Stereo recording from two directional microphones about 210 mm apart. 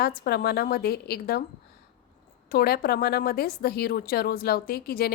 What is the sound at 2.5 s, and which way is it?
A woman's voice, 45° left (ahead or behind).